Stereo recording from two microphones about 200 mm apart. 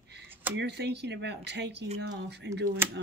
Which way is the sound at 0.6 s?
60° right (ahead or behind).